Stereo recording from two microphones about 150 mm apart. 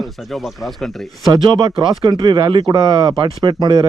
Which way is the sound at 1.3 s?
30° right (ahead or behind).